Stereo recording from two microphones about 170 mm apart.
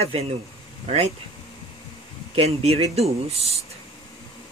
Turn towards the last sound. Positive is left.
turn(degrees=-35)  # may be behind; listen again after turning